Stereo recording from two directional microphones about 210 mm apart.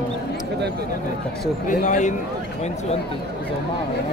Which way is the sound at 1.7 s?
35° left (ahead or behind).